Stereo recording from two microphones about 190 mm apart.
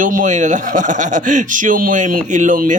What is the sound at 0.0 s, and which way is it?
Speech, 45° right (ahead or behind).